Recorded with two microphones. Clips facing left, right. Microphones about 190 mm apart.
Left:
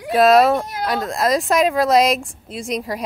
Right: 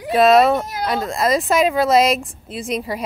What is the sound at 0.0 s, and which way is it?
A woman's voice, centre (ahead or behind).